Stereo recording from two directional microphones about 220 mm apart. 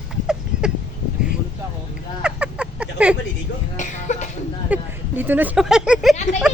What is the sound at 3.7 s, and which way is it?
Speech, 35° left (ahead or behind).